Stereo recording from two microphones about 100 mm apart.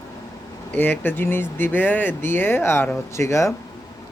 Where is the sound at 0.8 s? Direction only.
20° left (ahead or behind).